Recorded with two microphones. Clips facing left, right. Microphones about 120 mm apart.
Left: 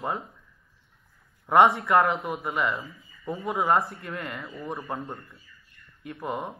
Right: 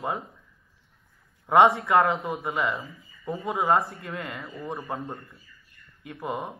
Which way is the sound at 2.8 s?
Centre (ahead or behind).